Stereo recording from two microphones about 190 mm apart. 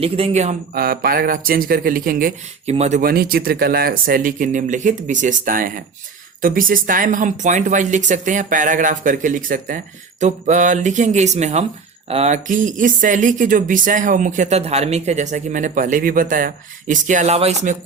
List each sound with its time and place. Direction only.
0.0 s speech: 35° right (ahead or behind)
0.7 s speech: 50° right (ahead or behind)
2.7 s speech: 35° right (ahead or behind)
3.0 s speech: 50° right (ahead or behind)